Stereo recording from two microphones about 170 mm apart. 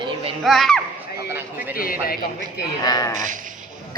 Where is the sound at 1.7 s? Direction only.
60° left (ahead or behind).